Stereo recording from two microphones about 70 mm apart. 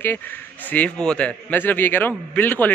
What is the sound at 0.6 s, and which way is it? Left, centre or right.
Speech, centre.